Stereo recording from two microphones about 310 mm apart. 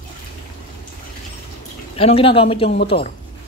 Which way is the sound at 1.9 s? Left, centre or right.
Centre.